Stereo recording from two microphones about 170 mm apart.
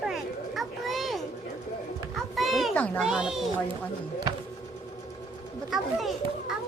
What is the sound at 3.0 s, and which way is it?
Speech, 5° right (ahead or behind).